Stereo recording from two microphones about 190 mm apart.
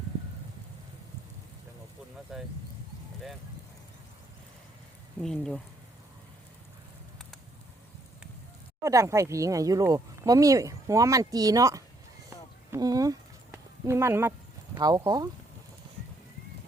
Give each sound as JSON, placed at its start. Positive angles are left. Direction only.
{"t": 2.3, "sound": "speech", "side_deg": 0}
{"t": 5.2, "sound": "speech", "side_deg": 0}
{"t": 8.8, "sound": "speech", "side_deg": -15}
{"t": 12.7, "sound": "a sound", "side_deg": -20}
{"t": 14.8, "sound": "speech", "side_deg": -20}